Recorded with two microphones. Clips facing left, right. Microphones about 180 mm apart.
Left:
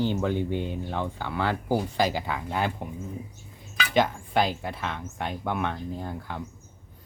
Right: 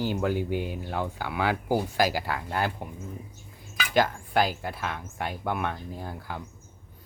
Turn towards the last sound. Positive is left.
turn(degrees=-5)  # may be behind; listen again after turning